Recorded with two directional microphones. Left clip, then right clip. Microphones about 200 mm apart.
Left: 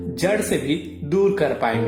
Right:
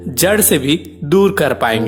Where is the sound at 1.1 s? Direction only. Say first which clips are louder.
Right 6 dB; 35° right (ahead or behind).